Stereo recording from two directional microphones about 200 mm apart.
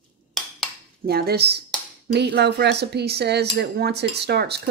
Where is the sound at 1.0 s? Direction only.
50° right (ahead or behind).